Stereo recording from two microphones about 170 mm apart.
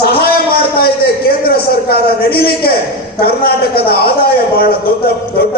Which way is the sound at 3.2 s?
65° left (ahead or behind).